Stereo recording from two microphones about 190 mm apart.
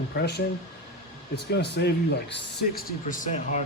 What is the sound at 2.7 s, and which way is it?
Speech, 45° left (ahead or behind).